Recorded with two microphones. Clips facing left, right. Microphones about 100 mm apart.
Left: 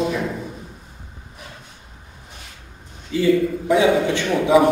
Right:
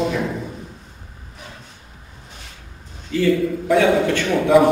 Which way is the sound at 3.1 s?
20° left (ahead or behind).